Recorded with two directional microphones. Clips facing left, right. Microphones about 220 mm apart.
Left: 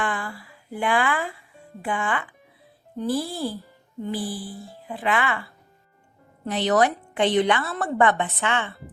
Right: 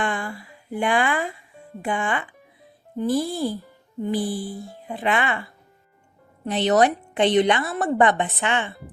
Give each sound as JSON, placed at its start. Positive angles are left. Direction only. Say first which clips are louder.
{"t": 0.0, "sound": "music", "louder": "right 2 dB", "side_deg": -20}
{"t": 3.0, "sound": "a woman's voice", "louder": "right 3 dB", "side_deg": -15}